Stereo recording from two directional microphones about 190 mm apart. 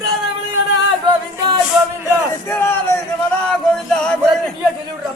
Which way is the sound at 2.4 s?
10° left (ahead or behind).